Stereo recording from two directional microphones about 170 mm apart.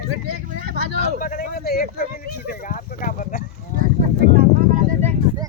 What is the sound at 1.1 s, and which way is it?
A man's voice, 55° left (ahead or behind).